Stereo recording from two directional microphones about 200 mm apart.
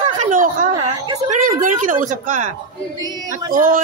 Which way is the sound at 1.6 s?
40° right (ahead or behind).